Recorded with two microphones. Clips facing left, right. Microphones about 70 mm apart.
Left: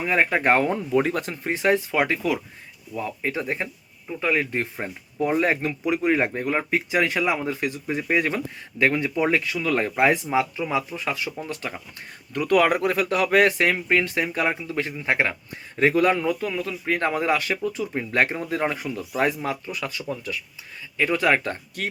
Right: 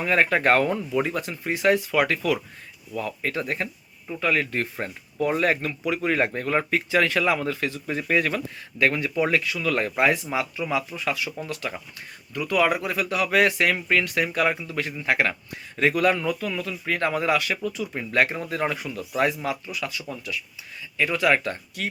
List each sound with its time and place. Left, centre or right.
0.0 s speech: centre
0.9 s speech: left
12.3 s speech: left